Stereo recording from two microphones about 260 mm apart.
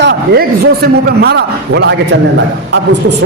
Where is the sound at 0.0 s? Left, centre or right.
Right.